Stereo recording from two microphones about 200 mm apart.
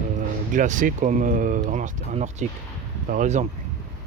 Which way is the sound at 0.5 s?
40° right (ahead or behind).